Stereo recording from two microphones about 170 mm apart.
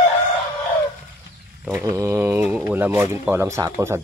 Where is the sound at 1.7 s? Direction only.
15° right (ahead or behind).